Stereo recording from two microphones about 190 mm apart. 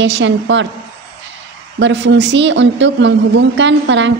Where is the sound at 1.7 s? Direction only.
70° right (ahead or behind).